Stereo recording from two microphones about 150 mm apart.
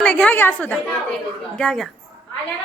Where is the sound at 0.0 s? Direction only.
10° left (ahead or behind).